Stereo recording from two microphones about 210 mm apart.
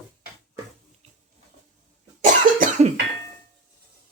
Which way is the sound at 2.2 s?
35° right (ahead or behind).